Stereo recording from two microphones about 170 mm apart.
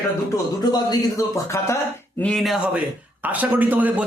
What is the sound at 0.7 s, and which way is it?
Speech, 20° left (ahead or behind).